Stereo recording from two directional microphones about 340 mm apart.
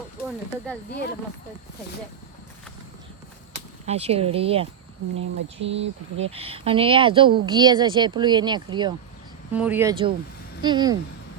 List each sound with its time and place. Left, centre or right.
3.8 s speech: centre
5.1 s speech: right
6.3 s speech: centre